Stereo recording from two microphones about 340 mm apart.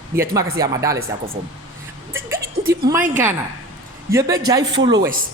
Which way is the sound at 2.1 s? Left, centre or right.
Centre.